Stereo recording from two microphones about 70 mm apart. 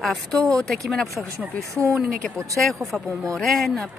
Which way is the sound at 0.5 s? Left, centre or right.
Centre.